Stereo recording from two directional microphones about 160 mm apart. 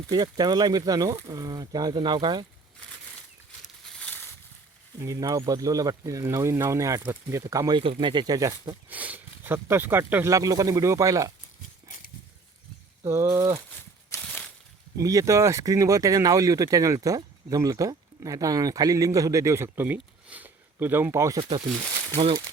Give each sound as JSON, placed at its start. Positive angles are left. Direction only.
{"t": 0.1, "sound": "speech", "side_deg": -25}
{"t": 3.9, "sound": "a sound", "side_deg": 10}
{"t": 4.9, "sound": "speech", "side_deg": -20}
{"t": 8.9, "sound": "speech", "side_deg": -10}
{"t": 13.1, "sound": "speech", "side_deg": -15}
{"t": 14.2, "sound": "a sound", "side_deg": 5}
{"t": 14.9, "sound": "speech", "side_deg": -20}
{"t": 22.1, "sound": "speech", "side_deg": -30}